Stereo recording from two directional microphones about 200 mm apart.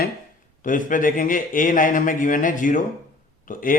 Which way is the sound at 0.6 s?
40° left (ahead or behind).